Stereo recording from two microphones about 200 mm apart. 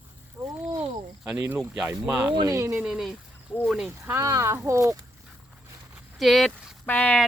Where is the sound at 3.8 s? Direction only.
10° right (ahead or behind).